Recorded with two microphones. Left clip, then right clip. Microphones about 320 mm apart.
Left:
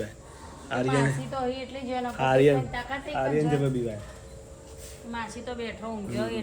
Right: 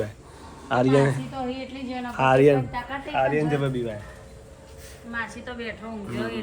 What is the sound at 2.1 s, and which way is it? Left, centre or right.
Speech, centre.